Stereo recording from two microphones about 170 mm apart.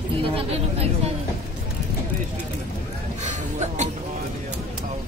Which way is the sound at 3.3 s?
45° right (ahead or behind).